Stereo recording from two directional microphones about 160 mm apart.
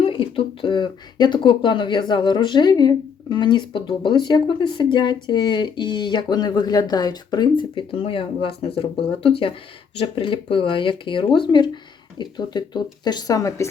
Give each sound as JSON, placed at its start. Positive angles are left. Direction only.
{"t": 0.0, "sound": "speech", "side_deg": 35}